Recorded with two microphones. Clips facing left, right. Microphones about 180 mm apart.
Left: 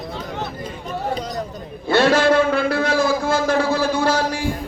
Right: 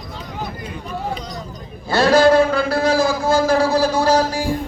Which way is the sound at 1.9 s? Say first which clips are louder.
Right 2 dB; 35° right (ahead or behind).